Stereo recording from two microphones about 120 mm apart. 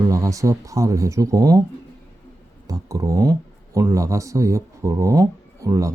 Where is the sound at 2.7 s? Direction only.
30° right (ahead or behind).